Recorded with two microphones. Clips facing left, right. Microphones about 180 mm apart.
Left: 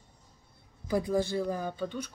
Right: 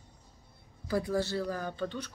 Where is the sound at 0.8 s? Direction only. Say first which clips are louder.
Left 2 dB; 15° left (ahead or behind).